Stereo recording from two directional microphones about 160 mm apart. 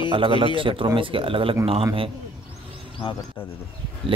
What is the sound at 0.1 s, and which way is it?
Speech, 35° right (ahead or behind).